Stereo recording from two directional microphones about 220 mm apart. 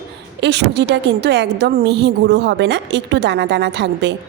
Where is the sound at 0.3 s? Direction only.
50° right (ahead or behind).